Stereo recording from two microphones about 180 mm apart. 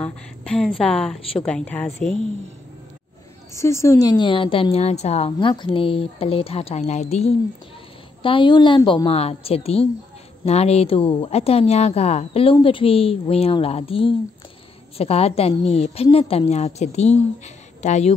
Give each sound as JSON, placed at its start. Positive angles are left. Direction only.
{"t": 0.0, "sound": "a woman's voice", "side_deg": 5}
{"t": 3.5, "sound": "a woman's voice", "side_deg": 15}